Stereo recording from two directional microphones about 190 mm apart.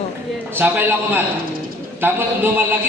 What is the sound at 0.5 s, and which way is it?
A man's voice, 10° right (ahead or behind).